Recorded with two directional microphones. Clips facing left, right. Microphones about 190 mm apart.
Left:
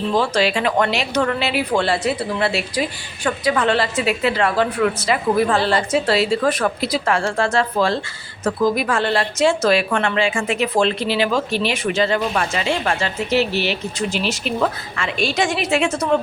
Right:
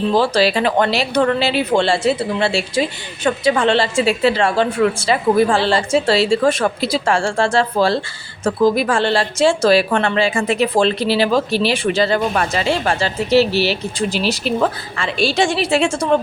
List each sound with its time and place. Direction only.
0.1 s a woman's voice: 35° right (ahead or behind)